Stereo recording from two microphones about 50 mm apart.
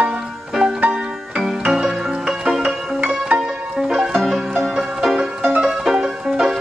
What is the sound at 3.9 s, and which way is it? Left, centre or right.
Music, centre.